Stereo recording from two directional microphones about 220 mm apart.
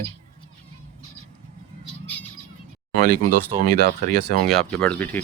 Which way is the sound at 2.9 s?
40° right (ahead or behind).